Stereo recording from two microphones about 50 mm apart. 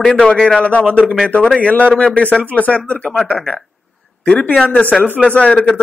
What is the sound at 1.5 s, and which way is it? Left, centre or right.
Speech, left.